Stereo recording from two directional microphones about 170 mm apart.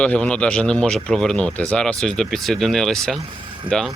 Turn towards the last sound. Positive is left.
turn(degrees=0)  # may be behind; listen again after turning